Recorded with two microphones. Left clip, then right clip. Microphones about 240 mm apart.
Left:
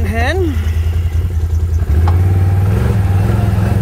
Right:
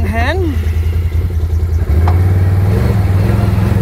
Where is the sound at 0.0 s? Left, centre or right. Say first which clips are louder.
Right 1 dB; centre.